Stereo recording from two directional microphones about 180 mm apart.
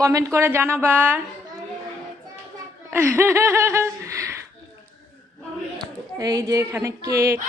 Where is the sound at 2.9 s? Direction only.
15° right (ahead or behind).